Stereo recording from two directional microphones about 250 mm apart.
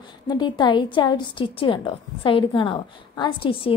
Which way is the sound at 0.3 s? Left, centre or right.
Centre.